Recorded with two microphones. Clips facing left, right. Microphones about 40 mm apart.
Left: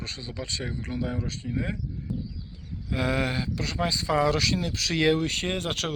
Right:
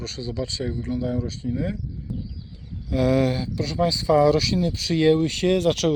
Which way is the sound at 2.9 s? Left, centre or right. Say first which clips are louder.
Right 6 dB; left.